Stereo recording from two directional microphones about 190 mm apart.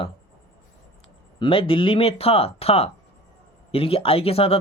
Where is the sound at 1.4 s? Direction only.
30° left (ahead or behind).